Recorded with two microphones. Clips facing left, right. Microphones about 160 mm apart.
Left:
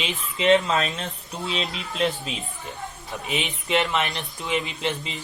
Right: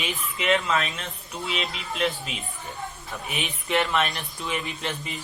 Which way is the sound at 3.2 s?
20° left (ahead or behind).